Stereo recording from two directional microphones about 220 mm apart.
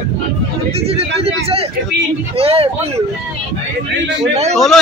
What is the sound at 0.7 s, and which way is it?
Speech, 25° right (ahead or behind).